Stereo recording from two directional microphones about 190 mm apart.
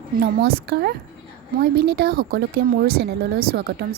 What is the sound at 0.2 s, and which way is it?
A woman's voice, 55° right (ahead or behind).